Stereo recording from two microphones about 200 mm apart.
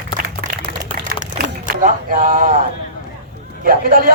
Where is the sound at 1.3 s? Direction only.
40° right (ahead or behind).